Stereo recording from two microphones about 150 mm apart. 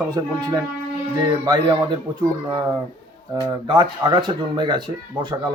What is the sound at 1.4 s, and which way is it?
Speech, 25° right (ahead or behind).